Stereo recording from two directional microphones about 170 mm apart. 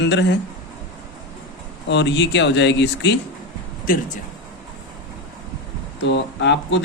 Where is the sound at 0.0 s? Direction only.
90° left.